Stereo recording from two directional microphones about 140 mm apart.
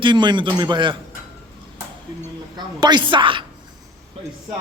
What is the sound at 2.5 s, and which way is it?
Speech, 30° right (ahead or behind).